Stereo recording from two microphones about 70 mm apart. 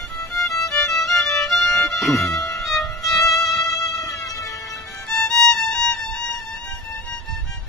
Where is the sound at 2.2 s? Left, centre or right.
Left.